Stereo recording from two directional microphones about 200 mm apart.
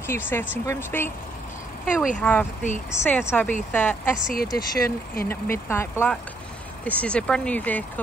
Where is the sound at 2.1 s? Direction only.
5° left (ahead or behind).